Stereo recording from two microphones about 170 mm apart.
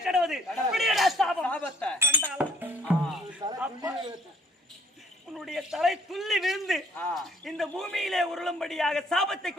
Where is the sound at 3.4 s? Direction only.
25° right (ahead or behind).